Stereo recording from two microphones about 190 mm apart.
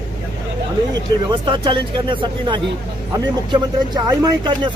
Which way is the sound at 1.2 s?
25° right (ahead or behind).